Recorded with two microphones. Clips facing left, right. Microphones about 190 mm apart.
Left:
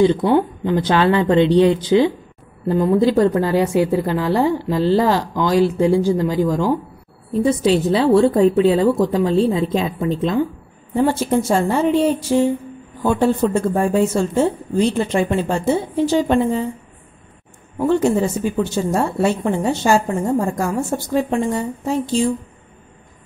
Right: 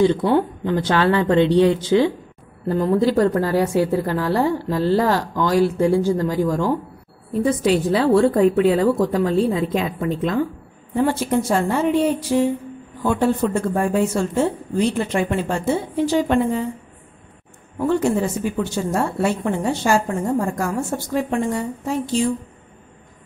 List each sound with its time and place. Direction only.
0.2 s a woman's voice: 10° left (ahead or behind)
7.4 s speech: 25° left (ahead or behind)
17.7 s speech: 25° left (ahead or behind)